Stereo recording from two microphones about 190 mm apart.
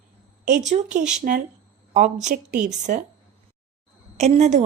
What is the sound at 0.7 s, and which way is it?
A woman's voice, 40° right (ahead or behind).